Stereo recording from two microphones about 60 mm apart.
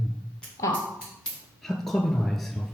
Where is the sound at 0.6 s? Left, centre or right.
Left.